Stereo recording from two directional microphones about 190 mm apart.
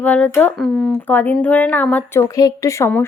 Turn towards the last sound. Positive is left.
turn(degrees=15)  # may be behind; listen again after turning